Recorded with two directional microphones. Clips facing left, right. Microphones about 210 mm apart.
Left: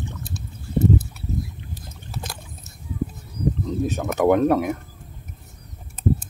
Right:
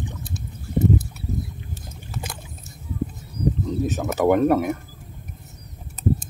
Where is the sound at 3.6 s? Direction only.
Centre (ahead or behind).